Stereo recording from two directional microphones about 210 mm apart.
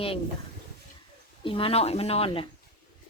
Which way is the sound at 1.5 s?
25° left (ahead or behind).